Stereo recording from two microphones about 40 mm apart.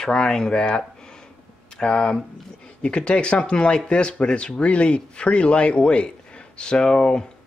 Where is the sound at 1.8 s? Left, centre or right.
Left.